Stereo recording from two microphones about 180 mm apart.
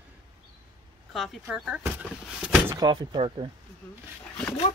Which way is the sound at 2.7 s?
20° right (ahead or behind).